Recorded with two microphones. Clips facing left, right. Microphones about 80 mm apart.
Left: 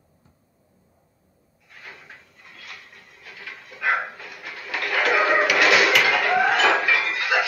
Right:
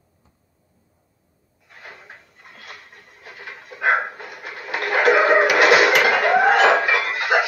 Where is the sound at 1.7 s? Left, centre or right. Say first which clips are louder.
Right 2 dB; right.